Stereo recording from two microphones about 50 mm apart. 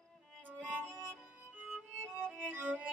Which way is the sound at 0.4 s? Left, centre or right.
Right.